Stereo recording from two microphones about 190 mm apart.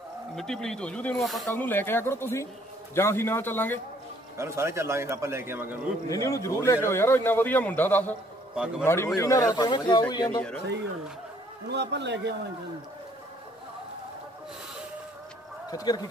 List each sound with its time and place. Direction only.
0.4 s speech: 5° left (ahead or behind)
4.4 s a man's voice: 15° right (ahead or behind)
6.0 s a man's voice: 15° left (ahead or behind)
11.7 s a man's voice: 65° right (ahead or behind)
15.7 s a man's voice: 20° left (ahead or behind)